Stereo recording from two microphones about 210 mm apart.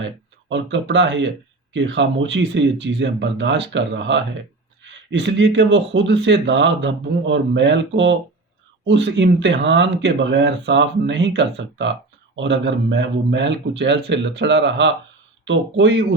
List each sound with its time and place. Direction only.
0.0 s speech: 60° right (ahead or behind)